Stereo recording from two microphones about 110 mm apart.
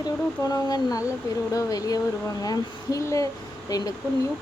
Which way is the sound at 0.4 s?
35° left (ahead or behind).